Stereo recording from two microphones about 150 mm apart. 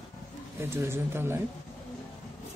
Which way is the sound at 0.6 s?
15° right (ahead or behind).